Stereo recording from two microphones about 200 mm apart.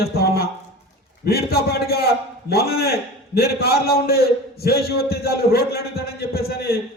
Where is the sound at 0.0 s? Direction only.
50° left (ahead or behind).